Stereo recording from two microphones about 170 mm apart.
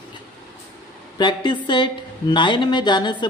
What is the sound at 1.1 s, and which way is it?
A woman's voice, 25° left (ahead or behind).